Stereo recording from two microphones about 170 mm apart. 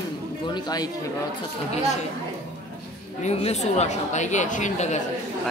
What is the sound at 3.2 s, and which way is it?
A woman's voice, 40° left (ahead or behind).